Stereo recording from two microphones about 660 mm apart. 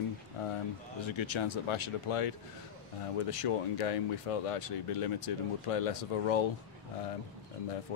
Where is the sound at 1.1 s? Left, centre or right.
Left.